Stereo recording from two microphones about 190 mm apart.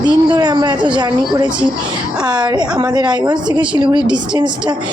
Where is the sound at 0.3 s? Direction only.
20° right (ahead or behind).